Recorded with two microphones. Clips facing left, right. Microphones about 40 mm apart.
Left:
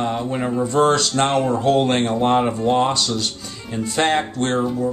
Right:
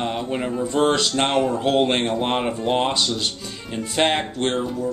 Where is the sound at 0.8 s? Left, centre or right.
Centre.